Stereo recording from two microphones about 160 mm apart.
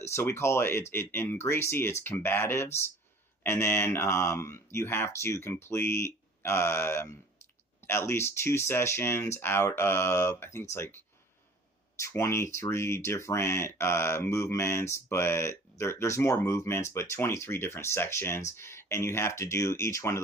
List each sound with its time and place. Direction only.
0.1 s speech: 15° left (ahead or behind)